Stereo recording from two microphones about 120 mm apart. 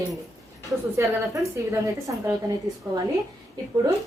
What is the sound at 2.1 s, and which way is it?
Speech, 25° right (ahead or behind).